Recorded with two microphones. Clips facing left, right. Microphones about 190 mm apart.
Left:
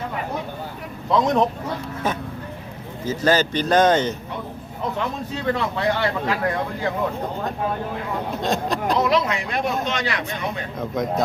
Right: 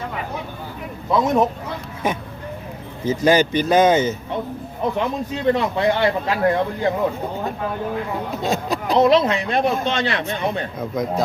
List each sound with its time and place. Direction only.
1.1 s a man's voice: 5° right (ahead or behind)
3.2 s speech: 10° right (ahead or behind)
5.5 s speech: 20° right (ahead or behind)
8.4 s speech: 5° right (ahead or behind)
9.0 s speech: 25° right (ahead or behind)
10.8 s a man's voice: centre (ahead or behind)